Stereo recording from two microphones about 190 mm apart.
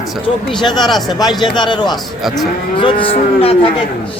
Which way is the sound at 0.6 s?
20° left (ahead or behind).